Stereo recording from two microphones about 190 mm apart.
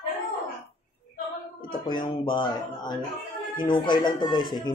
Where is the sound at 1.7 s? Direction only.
25° left (ahead or behind).